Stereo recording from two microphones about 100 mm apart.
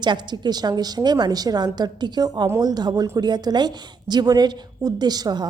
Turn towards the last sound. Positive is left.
turn(degrees=-40)  # may be behind; listen again after turning